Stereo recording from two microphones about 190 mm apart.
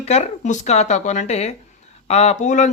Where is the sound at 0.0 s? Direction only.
35° left (ahead or behind).